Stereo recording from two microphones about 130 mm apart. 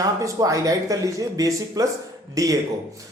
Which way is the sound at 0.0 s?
30° right (ahead or behind).